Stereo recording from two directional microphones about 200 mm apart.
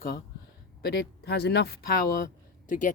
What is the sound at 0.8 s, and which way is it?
Speech, 55° left (ahead or behind).